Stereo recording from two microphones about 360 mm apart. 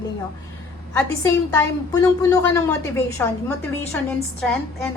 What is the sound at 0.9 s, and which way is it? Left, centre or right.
A woman's voice, centre.